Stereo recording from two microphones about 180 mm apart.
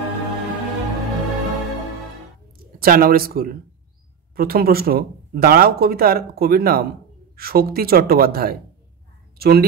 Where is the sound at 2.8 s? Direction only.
55° right (ahead or behind).